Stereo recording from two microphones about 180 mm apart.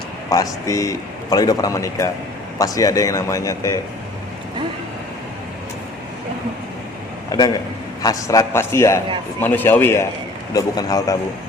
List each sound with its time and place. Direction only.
0.3 s a man's voice: 20° left (ahead or behind)
7.3 s a man's voice: 20° left (ahead or behind)